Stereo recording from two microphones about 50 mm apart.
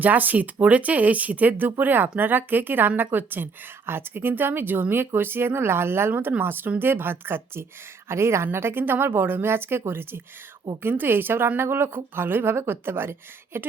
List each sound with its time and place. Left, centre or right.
0.0 s a woman's voice: right
8.0 s a woman's voice: right
8.8 s a woman's voice: right